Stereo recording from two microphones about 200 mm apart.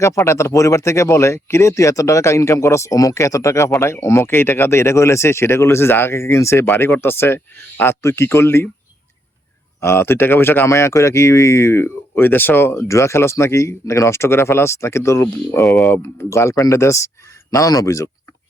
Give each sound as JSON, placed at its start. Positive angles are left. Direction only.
{"t": 0.0, "sound": "speech", "side_deg": 15}
{"t": 9.8, "sound": "speech", "side_deg": 10}
{"t": 15.6, "sound": "speech", "side_deg": 0}